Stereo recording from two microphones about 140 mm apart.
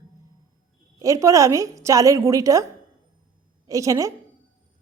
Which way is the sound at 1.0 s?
20° right (ahead or behind).